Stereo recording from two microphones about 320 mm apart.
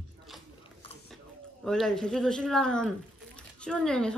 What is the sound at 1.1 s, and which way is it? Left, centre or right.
A man's voice, centre.